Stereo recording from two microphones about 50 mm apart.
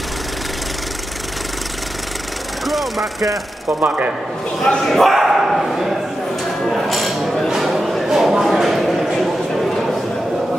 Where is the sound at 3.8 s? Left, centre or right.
Right.